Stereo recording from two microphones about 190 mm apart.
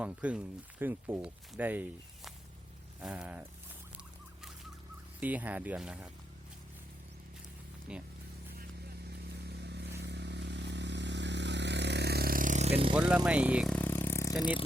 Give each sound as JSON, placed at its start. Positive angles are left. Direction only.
{"t": 0.0, "sound": "speech", "side_deg": -5}
{"t": 5.2, "sound": "speech", "side_deg": -10}
{"t": 7.9, "sound": "speech", "side_deg": -5}
{"t": 9.5, "sound": "a sound", "side_deg": -60}
{"t": 10.0, "sound": "vehicle", "side_deg": -65}
{"t": 13.2, "sound": "speech", "side_deg": -5}
{"t": 13.7, "sound": "vehicle", "side_deg": 10}